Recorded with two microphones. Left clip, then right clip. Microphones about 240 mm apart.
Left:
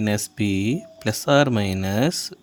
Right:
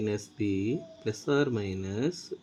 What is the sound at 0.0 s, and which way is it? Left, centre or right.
Speech, left.